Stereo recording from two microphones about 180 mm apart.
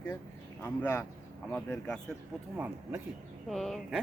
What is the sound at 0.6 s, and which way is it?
Speech, 15° left (ahead or behind).